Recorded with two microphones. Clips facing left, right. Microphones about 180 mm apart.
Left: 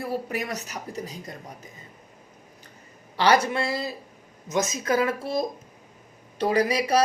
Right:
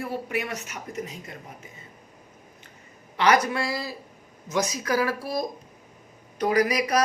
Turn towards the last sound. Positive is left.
turn(degrees=30)  # may be behind; listen again after turning